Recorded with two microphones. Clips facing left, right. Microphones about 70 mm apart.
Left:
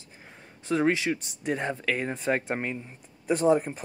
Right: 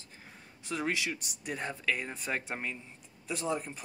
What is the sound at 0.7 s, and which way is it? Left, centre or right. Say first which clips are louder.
Speech: left 9 dB; left.